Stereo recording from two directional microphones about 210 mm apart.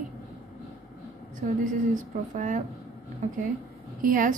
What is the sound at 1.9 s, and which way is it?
Speech, 35° right (ahead or behind).